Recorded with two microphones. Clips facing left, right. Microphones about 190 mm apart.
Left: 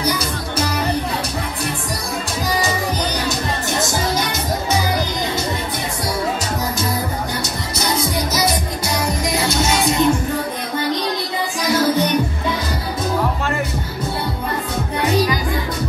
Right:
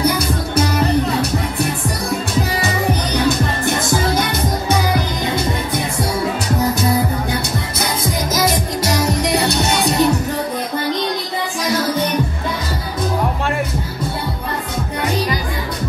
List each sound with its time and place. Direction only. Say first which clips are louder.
9.1 s music: right 3 dB; 65° right (ahead or behind)
9.8 s music: right 1 dB; 35° right (ahead or behind)